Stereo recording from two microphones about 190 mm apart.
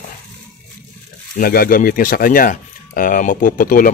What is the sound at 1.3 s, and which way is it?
A man's voice, 50° left (ahead or behind).